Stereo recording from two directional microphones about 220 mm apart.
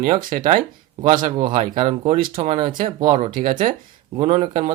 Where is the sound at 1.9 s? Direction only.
40° right (ahead or behind).